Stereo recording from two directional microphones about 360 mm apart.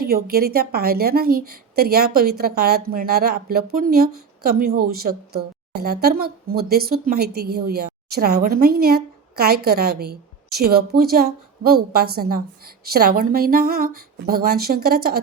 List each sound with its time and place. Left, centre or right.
0.0 s a woman's voice: right